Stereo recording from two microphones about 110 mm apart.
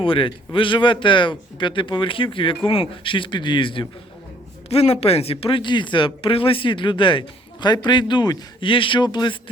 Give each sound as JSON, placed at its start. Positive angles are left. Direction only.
{"t": 0.0, "sound": "speech", "side_deg": 55}
{"t": 4.7, "sound": "speech", "side_deg": 70}